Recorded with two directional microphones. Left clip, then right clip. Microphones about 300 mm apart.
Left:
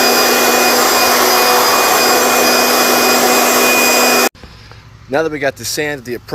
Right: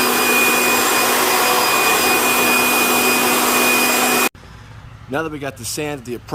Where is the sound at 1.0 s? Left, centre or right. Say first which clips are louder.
Left 5 dB; left.